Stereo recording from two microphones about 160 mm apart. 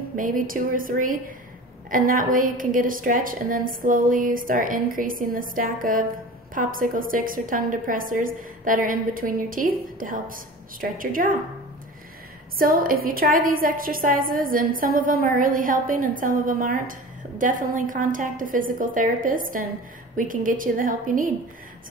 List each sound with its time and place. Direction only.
0.1 s a woman's voice: 55° right (ahead or behind)
12.5 s a woman's voice: 65° right (ahead or behind)